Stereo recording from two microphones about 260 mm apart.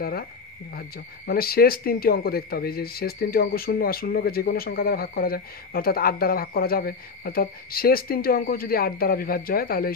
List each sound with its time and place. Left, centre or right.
0.0 s speech: left